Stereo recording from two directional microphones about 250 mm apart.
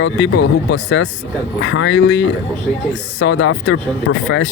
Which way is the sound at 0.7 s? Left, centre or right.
Left.